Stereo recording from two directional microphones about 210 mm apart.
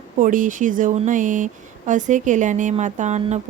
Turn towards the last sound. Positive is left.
turn(degrees=-35)  # may be behind; listen again after turning